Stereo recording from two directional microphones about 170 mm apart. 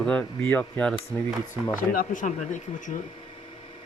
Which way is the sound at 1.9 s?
50° left (ahead or behind).